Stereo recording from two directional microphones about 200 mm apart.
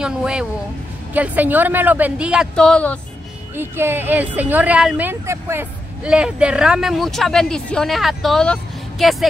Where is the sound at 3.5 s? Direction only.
10° right (ahead or behind).